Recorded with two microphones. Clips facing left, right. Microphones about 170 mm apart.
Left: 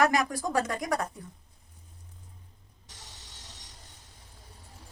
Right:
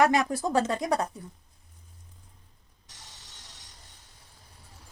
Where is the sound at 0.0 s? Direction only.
25° right (ahead or behind).